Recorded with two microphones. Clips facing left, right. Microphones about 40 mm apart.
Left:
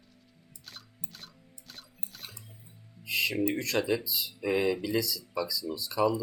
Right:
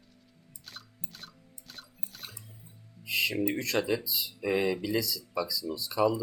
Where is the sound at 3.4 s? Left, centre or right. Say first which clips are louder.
Even; centre.